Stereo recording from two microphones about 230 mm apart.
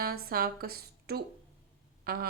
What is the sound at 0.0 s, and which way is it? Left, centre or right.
A woman's voice, right.